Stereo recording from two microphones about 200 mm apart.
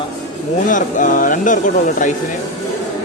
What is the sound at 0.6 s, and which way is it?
Speech, 40° left (ahead or behind).